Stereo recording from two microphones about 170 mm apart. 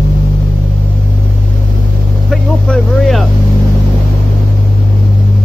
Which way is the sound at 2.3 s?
Centre (ahead or behind).